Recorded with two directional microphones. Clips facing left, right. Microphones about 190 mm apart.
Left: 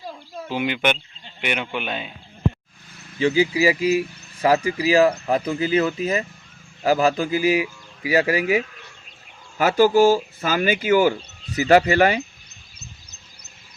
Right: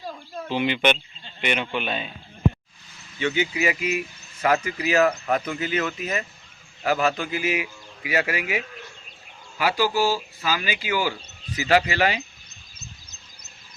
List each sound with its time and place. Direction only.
0.0 s speech: 10° left (ahead or behind)
3.2 s speech: 30° left (ahead or behind); by 12.2 s 50° left (ahead or behind)